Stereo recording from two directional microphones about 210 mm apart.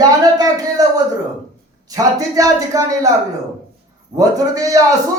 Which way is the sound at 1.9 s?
15° right (ahead or behind).